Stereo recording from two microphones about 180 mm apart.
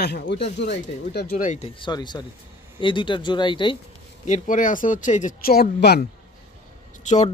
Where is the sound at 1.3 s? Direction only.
45° left (ahead or behind).